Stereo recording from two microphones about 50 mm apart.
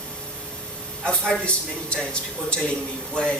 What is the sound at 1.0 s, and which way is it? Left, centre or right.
Speech, centre.